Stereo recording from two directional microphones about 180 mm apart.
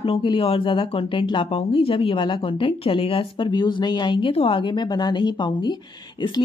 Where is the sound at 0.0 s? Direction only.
30° left (ahead or behind).